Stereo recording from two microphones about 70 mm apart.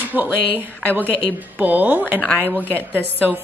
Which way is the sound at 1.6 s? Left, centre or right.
Right.